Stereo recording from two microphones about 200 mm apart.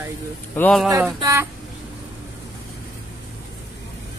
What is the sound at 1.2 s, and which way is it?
Speech, 15° right (ahead or behind).